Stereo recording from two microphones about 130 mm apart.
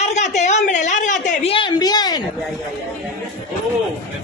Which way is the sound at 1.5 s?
40° left (ahead or behind).